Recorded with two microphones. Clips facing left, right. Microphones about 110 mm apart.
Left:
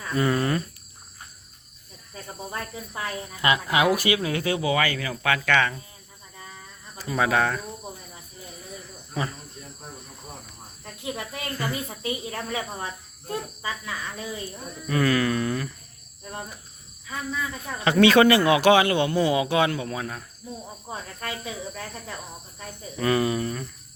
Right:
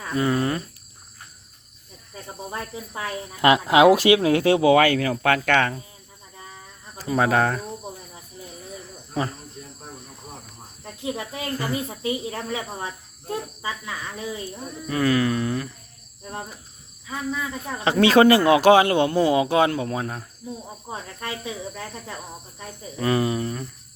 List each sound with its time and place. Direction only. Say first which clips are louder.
0.0 s speech: right 1 dB; 20° right (ahead or behind)
2.1 s cricket: right 1 dB; 15° right (ahead or behind)
3.4 s speech: right 7 dB; 75° right (ahead or behind); by 5.7 s 45° right (ahead or behind)
6.3 s a sound: right 1 dB; 20° right (ahead or behind)
7.2 s speech: right 2 dB; 40° right (ahead or behind)
10.8 s speech: right 3 dB; 20° right (ahead or behind)
17.1 s speech: right 2 dB; 20° right (ahead or behind)
18.0 s speech: right 2 dB; 35° right (ahead or behind)
20.9 s speech: right 1 dB; 20° right (ahead or behind)